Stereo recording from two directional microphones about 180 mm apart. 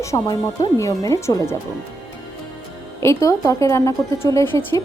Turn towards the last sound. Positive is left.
turn(degrees=15)  # may be behind; listen again after turning